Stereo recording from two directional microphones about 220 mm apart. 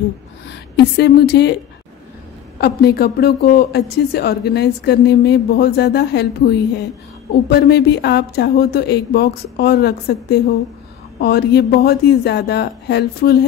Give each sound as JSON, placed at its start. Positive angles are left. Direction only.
{"t": 0.7, "sound": "a woman's voice", "side_deg": 50}
{"t": 2.6, "sound": "a woman's voice", "side_deg": 45}